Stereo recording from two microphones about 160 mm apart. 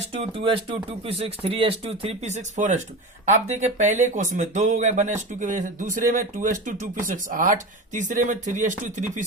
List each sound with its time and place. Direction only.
0.2 s speech: 35° right (ahead or behind)